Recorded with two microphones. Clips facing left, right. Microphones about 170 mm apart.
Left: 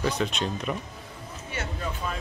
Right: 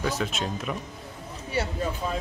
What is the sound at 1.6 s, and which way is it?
Speech, 35° right (ahead or behind).